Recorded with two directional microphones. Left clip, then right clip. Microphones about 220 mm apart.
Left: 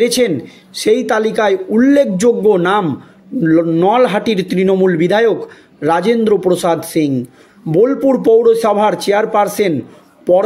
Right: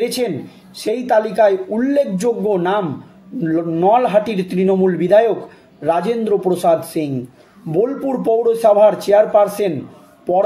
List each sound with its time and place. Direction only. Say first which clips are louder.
0.0 s speech: left 6 dB; 45° left (ahead or behind)